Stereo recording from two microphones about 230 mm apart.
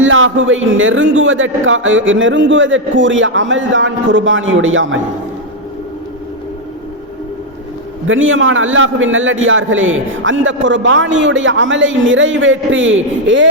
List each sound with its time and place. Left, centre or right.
0.0 s a man's voice: right
8.0 s a man's voice: right